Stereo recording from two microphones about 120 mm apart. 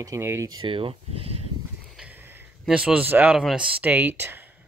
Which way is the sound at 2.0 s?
15° right (ahead or behind).